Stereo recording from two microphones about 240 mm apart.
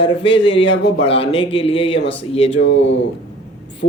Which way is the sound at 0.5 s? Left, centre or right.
Left.